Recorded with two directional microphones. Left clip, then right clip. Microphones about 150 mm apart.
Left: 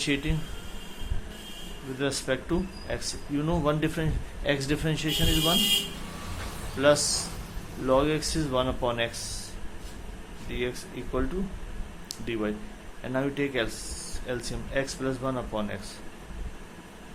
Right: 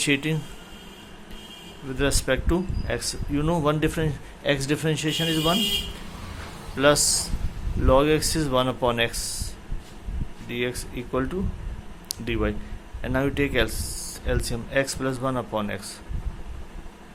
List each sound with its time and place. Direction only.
0.0 s speech: 55° right (ahead or behind)
2.0 s speech: 55° right (ahead or behind)
6.7 s speech: 55° right (ahead or behind)
10.5 s speech: 55° right (ahead or behind)